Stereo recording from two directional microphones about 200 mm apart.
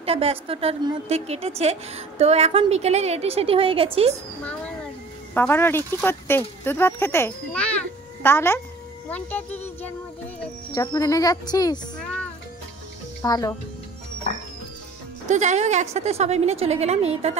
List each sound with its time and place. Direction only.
0.0 s a woman's voice: 30° right (ahead or behind)
5.3 s speech: 10° left (ahead or behind)
12.0 s music: 5° left (ahead or behind)
13.2 s speech: 20° left (ahead or behind)
15.2 s a woman's voice: 35° right (ahead or behind)